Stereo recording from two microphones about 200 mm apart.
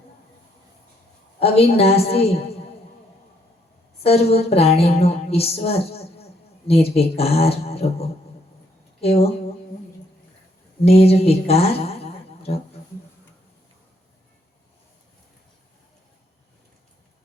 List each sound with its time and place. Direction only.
1.4 s speech: 30° left (ahead or behind)
4.0 s a sound: 30° left (ahead or behind)
9.0 s speech: 30° left (ahead or behind)
10.8 s speech: 30° left (ahead or behind)